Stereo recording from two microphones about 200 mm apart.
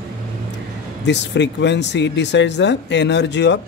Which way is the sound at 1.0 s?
60° left (ahead or behind).